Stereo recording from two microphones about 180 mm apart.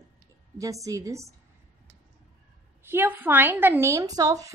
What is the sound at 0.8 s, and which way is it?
Speech, 15° right (ahead or behind).